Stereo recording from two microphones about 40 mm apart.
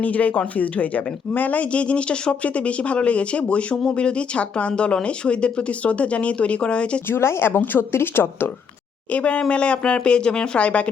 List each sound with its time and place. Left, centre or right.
0.0 s speech: left
7.1 s speech: left
7.8 s a woman's voice: left
9.1 s speech: left